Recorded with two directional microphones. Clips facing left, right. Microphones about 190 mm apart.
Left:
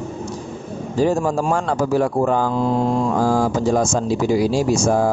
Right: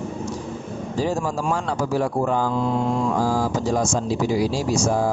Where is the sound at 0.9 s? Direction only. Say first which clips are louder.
Left 6 dB; 50° left (ahead or behind).